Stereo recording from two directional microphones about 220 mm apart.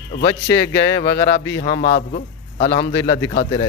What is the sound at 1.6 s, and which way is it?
A man's voice, 35° left (ahead or behind).